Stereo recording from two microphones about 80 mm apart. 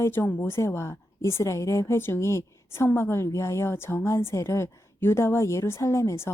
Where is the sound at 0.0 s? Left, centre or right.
Left.